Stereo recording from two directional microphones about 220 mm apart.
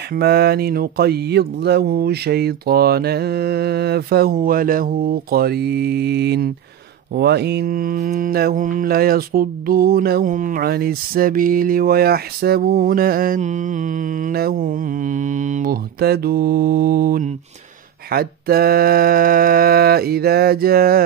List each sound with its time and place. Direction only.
0.1 s speech: 45° right (ahead or behind)
7.2 s mantra: 45° right (ahead or behind)
18.1 s speech: 45° right (ahead or behind)